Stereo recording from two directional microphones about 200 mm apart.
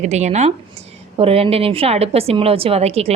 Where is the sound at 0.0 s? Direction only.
35° right (ahead or behind).